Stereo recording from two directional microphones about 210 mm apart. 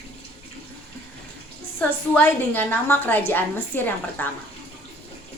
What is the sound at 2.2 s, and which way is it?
A woman's voice, 10° left (ahead or behind).